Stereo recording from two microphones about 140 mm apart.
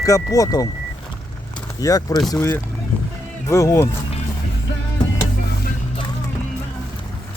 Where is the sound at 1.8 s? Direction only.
25° left (ahead or behind).